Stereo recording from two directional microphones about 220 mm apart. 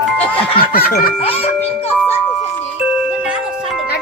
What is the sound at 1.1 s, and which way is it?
Speech, 25° left (ahead or behind).